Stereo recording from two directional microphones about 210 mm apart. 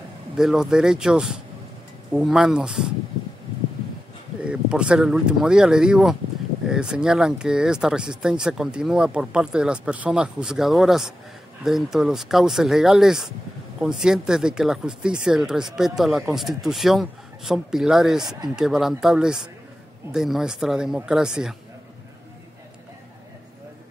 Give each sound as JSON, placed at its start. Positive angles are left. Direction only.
{"t": 0.4, "sound": "speech", "side_deg": 0}
{"t": 4.5, "sound": "speech", "side_deg": -5}